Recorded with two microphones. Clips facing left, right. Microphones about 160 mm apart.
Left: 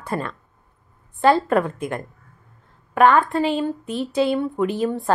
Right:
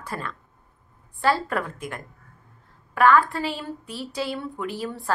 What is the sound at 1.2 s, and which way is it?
A woman's voice, 25° left (ahead or behind).